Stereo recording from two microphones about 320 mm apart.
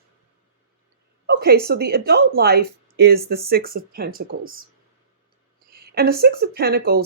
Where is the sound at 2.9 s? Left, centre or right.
Right.